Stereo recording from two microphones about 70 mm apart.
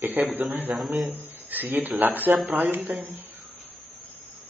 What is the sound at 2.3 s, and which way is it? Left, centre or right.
Speech, centre.